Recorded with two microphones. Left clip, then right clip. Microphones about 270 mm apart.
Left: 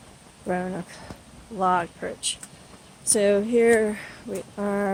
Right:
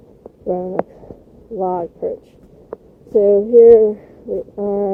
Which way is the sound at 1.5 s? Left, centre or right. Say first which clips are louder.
Right 2 dB; left.